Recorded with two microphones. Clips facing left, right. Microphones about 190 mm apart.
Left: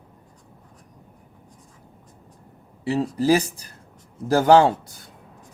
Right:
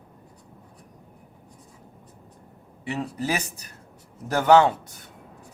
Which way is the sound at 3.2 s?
35° left (ahead or behind).